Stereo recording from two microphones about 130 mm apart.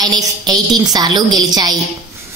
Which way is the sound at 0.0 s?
30° right (ahead or behind).